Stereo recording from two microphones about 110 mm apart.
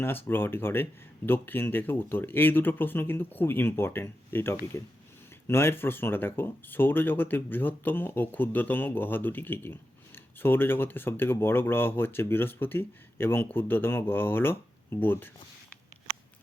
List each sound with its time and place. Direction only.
0.0 s speech: 20° left (ahead or behind)